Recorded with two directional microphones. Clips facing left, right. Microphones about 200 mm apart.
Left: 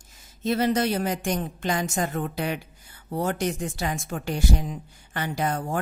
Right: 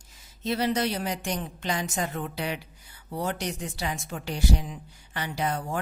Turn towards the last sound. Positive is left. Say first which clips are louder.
# left 3 dB
turn(degrees=50)  # may be behind; listen again after turning